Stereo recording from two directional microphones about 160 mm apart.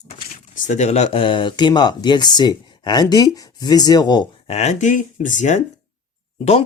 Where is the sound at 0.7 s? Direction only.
45° left (ahead or behind); by 4.3 s 25° left (ahead or behind).